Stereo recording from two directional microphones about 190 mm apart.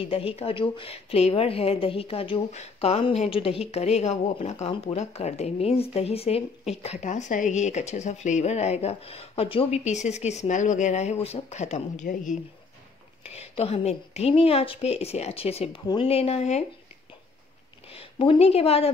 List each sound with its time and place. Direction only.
0.0 s a woman's voice: 30° left (ahead or behind)
17.8 s a woman's voice: 30° left (ahead or behind)